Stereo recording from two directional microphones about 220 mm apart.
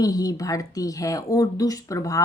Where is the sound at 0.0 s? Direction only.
15° left (ahead or behind).